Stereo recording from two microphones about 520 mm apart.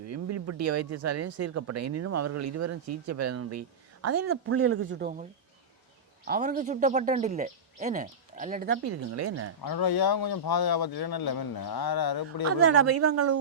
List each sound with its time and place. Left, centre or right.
0.0 s speech: right
6.2 s speech: centre
9.6 s speech: left
13.0 s speech: right